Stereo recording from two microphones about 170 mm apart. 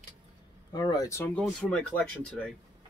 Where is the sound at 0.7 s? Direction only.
20° left (ahead or behind).